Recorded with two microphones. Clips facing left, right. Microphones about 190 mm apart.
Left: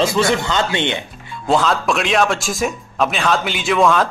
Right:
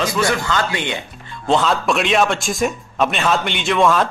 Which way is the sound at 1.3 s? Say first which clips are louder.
Even; 5° left (ahead or behind).